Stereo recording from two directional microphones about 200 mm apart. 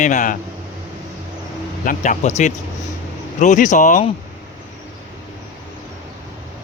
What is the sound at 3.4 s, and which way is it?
Speech, 40° left (ahead or behind).